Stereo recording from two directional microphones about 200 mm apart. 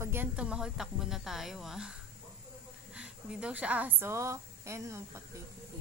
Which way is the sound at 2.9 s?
5° right (ahead or behind).